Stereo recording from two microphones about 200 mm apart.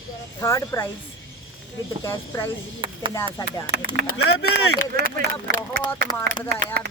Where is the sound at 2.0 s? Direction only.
15° left (ahead or behind).